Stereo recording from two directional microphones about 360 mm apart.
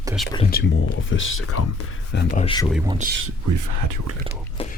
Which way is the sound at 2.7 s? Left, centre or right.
Centre.